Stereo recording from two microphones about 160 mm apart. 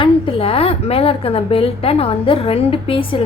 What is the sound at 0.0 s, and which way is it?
A woman's voice, 35° left (ahead or behind).